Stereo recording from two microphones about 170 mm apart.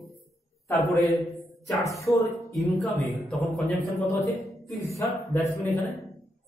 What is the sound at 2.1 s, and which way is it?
Music, 15° left (ahead or behind).